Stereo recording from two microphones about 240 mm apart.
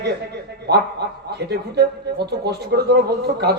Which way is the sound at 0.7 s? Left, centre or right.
Right.